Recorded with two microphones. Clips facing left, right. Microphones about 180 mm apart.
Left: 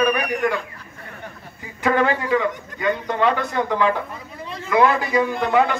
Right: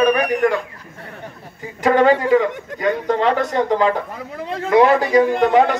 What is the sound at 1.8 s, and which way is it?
A man's voice, 40° right (ahead or behind).